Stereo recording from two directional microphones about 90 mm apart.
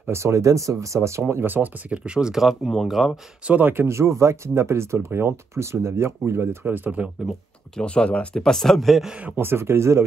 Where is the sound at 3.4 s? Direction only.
20° right (ahead or behind).